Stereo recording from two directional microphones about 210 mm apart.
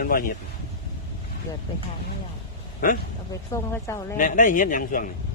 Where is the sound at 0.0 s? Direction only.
40° left (ahead or behind).